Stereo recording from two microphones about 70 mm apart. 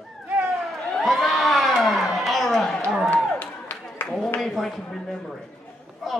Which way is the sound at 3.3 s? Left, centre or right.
Left.